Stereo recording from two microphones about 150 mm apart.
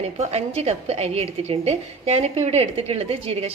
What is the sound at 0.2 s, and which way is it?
A woman's voice, 45° right (ahead or behind).